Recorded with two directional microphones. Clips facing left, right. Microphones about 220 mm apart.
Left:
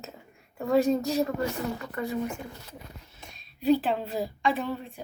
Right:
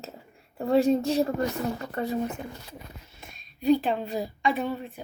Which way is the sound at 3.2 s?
Centre (ahead or behind).